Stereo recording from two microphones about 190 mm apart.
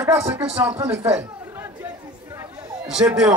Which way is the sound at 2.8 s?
5° right (ahead or behind).